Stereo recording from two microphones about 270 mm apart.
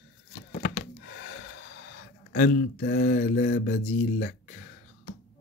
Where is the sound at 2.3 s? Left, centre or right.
Left.